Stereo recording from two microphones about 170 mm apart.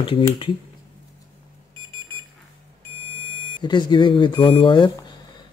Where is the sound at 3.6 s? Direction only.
25° left (ahead or behind).